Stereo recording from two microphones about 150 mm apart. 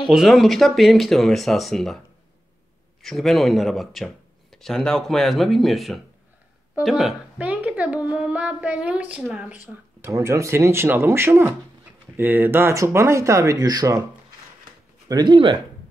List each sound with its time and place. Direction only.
0.1 s speech: centre (ahead or behind)
3.0 s a woman's voice: centre (ahead or behind)
10.1 s a woman's voice: 20° right (ahead or behind)
15.0 s speech: 30° right (ahead or behind)